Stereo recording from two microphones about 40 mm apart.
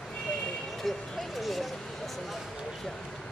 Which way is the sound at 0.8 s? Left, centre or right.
Centre.